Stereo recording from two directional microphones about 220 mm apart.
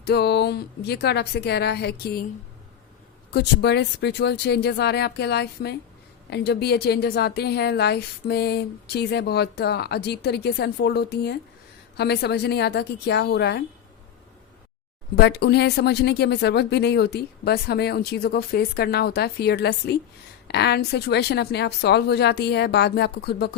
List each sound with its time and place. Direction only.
0.0 s a woman's voice: 45° left (ahead or behind)
3.3 s a woman's voice: 50° left (ahead or behind)
15.1 s a woman's voice: 50° left (ahead or behind)